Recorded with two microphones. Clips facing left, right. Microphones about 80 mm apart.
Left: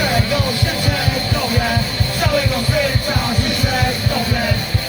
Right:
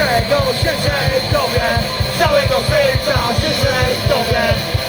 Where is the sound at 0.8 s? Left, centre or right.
Right.